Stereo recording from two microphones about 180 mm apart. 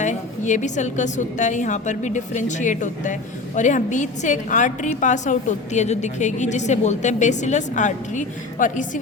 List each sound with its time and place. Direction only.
0.0 s a woman's voice: 40° left (ahead or behind)